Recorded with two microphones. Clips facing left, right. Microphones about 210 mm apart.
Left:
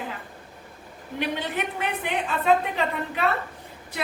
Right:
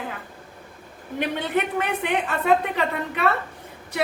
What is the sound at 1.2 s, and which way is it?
A woman's voice, 55° right (ahead or behind).